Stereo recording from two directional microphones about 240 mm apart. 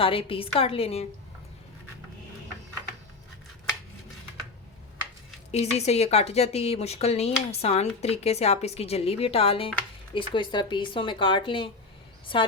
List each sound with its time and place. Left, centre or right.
0.0 s a woman's voice: left
5.5 s a woman's voice: left